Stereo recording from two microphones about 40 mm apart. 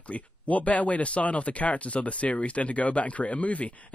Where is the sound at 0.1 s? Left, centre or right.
Left.